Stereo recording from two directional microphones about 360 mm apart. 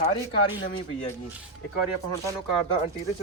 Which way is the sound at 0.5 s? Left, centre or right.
Centre.